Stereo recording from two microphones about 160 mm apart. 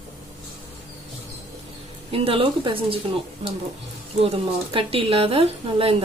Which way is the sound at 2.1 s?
35° right (ahead or behind).